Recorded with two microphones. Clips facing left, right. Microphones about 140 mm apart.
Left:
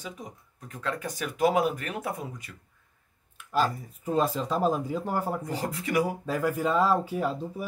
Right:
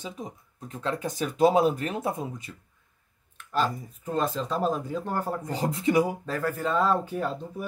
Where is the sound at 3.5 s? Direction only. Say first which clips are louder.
Left 1 dB; 5° left (ahead or behind).